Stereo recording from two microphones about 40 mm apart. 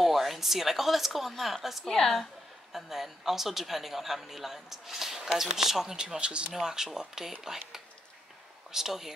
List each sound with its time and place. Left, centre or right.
0.0 s speech: centre
1.9 s a woman's voice: centre
2.7 s speech: centre
5.9 s speech: right
6.5 s speech: centre
8.7 s speech: centre